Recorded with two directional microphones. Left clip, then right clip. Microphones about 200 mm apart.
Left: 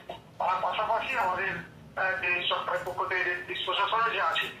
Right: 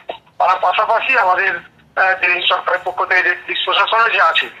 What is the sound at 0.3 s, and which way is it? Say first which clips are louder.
Speech: right 14 dB; 50° right (ahead or behind).